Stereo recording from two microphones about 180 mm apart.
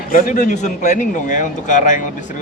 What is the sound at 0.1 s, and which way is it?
Speech, 50° left (ahead or behind).